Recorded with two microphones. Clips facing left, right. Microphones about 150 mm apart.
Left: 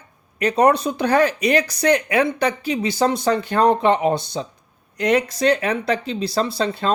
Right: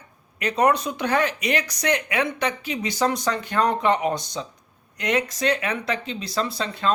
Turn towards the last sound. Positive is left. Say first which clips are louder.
# left 3 dB
turn(degrees=35)  # may be behind; listen again after turning